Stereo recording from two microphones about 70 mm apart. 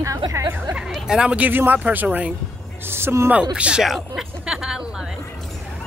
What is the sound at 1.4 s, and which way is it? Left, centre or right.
Speech, right.